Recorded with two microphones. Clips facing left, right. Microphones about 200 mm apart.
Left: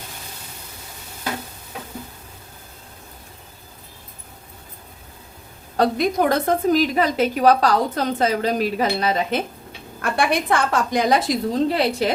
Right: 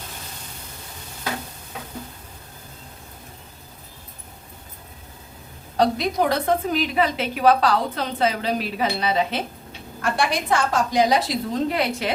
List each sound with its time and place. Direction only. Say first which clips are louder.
5.7 s a woman's voice: left 2 dB; 50° left (ahead or behind)
10.0 s a woman's voice: left 2 dB; 60° left (ahead or behind)
11.5 s a woman's voice: left 2 dB; 35° left (ahead or behind)